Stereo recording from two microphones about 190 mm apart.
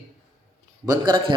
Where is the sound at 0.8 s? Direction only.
20° right (ahead or behind).